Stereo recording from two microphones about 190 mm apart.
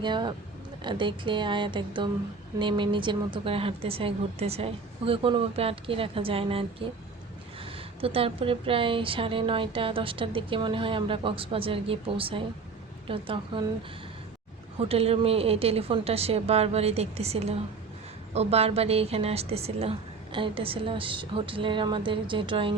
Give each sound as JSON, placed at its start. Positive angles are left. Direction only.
{"t": 0.0, "sound": "a woman's voice", "side_deg": -25}
{"t": 14.8, "sound": "a woman's voice", "side_deg": -30}